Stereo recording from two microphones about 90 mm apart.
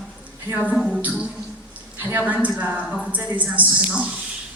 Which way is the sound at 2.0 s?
20° right (ahead or behind).